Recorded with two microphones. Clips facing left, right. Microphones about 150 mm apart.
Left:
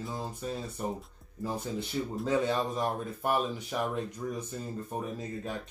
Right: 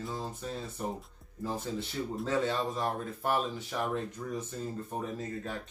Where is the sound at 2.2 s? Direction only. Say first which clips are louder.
Left 2 dB; 15° left (ahead or behind).